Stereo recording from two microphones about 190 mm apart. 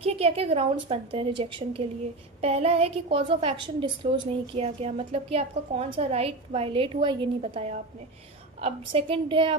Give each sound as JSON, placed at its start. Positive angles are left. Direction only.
{"t": 0.0, "sound": "a woman's voice", "side_deg": -30}